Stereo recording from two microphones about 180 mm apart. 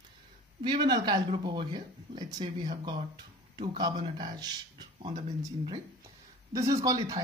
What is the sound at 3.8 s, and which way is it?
Speech, 25° right (ahead or behind).